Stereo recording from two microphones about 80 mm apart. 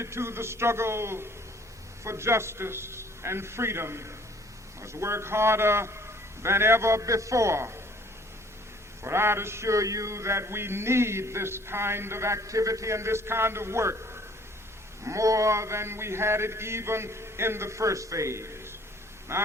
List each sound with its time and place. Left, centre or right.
0.0 s mantra: right
9.0 s mantra: right